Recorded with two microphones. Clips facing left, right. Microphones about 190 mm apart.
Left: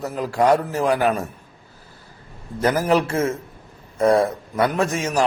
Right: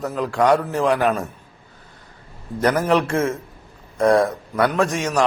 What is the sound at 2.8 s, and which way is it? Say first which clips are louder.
A man's voice: left 1 dB; 10° left (ahead or behind).